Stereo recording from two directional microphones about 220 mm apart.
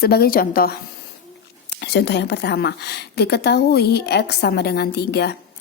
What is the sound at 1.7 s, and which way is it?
A woman's voice, 50° left (ahead or behind).